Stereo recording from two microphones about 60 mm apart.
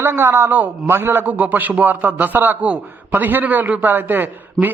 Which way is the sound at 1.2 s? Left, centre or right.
Right.